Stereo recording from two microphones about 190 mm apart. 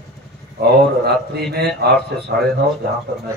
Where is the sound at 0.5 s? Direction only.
55° right (ahead or behind).